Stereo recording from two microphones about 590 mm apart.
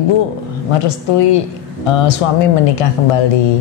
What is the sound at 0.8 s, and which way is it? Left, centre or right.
A woman's voice, left.